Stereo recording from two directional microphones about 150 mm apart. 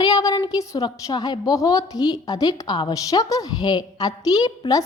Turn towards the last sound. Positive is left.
turn(degrees=25)  # may be behind; listen again after turning